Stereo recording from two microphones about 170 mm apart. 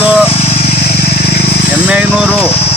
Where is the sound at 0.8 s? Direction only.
65° left (ahead or behind).